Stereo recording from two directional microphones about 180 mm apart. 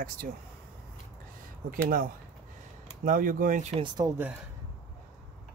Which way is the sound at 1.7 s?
50° right (ahead or behind).